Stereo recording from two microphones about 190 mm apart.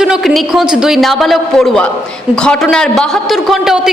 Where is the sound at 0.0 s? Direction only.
Centre (ahead or behind).